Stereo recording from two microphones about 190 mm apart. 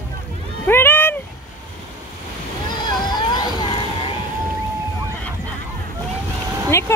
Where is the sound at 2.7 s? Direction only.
20° left (ahead or behind).